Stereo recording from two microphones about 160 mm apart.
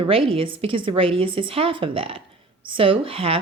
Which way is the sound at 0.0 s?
35° right (ahead or behind).